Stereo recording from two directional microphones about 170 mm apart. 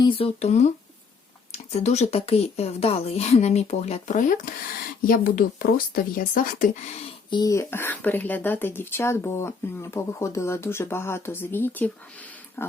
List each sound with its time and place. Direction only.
0.0 s speech: 35° left (ahead or behind); by 6.7 s 55° left (ahead or behind)
7.3 s speech: 25° left (ahead or behind)